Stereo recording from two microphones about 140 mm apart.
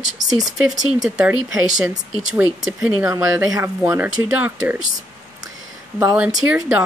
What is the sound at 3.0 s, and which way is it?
Speech, 20° right (ahead or behind).